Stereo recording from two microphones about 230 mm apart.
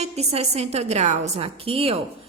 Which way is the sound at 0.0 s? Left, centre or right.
Right.